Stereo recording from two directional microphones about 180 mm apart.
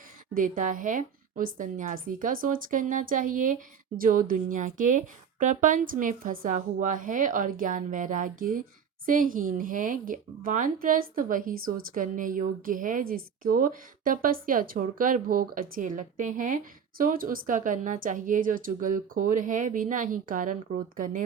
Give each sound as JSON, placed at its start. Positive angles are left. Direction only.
{"t": 0.3, "sound": "a woman's voice", "side_deg": -45}